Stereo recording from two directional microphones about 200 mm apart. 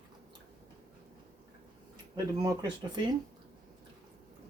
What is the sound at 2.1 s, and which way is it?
Speech, 20° right (ahead or behind).